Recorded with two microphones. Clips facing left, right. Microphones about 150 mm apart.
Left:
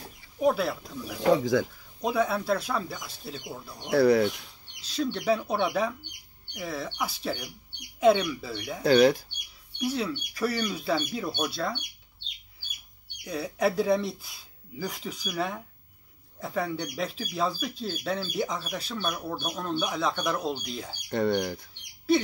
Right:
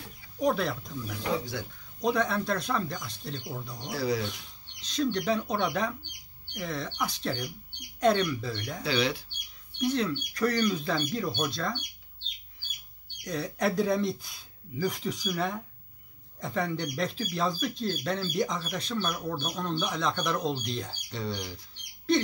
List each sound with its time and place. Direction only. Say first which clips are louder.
0.4 s speech: left 2 dB; 5° left (ahead or behind)
3.9 s speech: left 9 dB; 60° left (ahead or behind)
4.8 s speech: left 1 dB; 5° left (ahead or behind)
8.8 s speech: left 9 dB; 45° left (ahead or behind)
9.8 s speech: right 1 dB; 5° left (ahead or behind)
13.2 s speech: left 2 dB; 10° left (ahead or behind)
21.1 s speech: left 11 dB; 55° left (ahead or behind)
22.1 s speech: left 2 dB; 5° left (ahead or behind)